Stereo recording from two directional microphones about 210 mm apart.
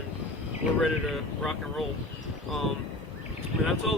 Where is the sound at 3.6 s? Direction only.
Centre (ahead or behind).